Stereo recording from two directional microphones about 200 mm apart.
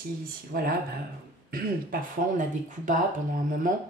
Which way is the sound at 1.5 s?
45° right (ahead or behind).